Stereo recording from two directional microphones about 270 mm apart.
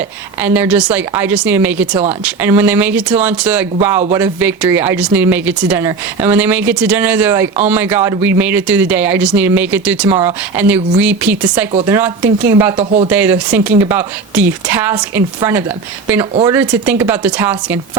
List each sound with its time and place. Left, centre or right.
0.4 s speech: centre
12.7 s speech: right
13.1 s speech: centre